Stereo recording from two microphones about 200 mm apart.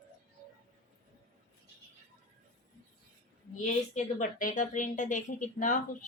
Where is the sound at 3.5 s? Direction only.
40° left (ahead or behind).